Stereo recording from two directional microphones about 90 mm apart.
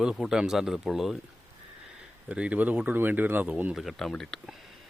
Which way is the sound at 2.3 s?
15° right (ahead or behind).